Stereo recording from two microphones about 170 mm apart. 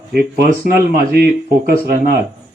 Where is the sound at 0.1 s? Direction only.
70° right (ahead or behind).